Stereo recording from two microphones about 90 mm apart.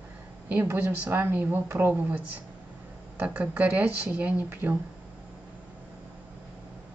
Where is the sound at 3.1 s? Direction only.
15° right (ahead or behind).